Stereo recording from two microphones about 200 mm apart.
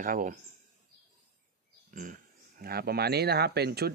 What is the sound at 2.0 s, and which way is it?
Speech, 40° right (ahead or behind).